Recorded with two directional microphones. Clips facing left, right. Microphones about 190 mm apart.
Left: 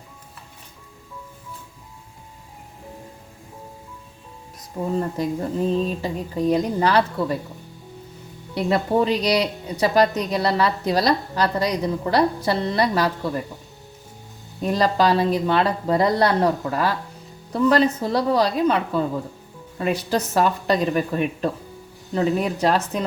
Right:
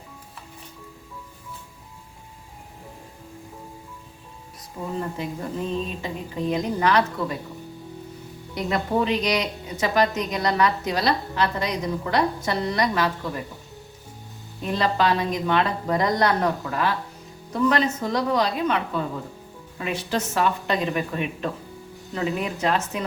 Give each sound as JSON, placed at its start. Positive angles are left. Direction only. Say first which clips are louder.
{"t": 4.9, "sound": "a woman's voice", "louder": "left 5 dB", "side_deg": 35}
{"t": 8.5, "sound": "a woman's voice", "louder": "left 4 dB", "side_deg": 35}
{"t": 14.6, "sound": "a woman's voice", "louder": "left 3 dB", "side_deg": 40}
{"t": 19.8, "sound": "a woman's voice", "louder": "left 4 dB", "side_deg": 40}